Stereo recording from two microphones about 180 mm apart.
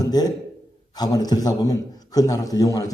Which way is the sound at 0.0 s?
20° left (ahead or behind).